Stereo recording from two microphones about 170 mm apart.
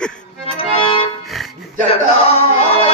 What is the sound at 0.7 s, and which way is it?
Music, 35° left (ahead or behind).